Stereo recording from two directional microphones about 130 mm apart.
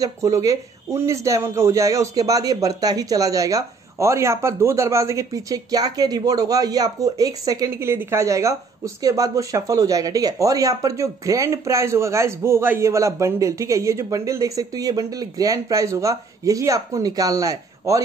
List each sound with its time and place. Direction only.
0.0 s speech: 25° right (ahead or behind)